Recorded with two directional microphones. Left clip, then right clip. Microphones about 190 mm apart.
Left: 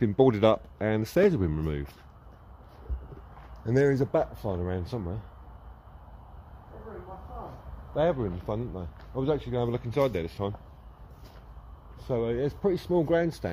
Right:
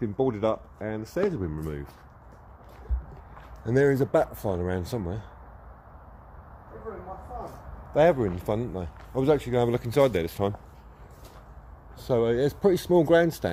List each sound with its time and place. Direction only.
0.0 s speech: 45° left (ahead or behind)
3.6 s speech: centre (ahead or behind); by 5.2 s 15° right (ahead or behind)
7.9 s speech: 30° right (ahead or behind)
12.0 s speech: 20° right (ahead or behind)